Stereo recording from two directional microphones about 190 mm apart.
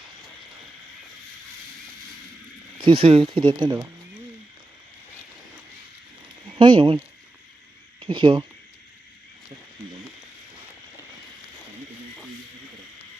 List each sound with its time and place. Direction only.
2.7 s speech: 25° right (ahead or behind)
6.6 s speech: 25° right (ahead or behind)